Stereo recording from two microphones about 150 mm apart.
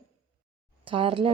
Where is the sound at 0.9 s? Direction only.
35° right (ahead or behind).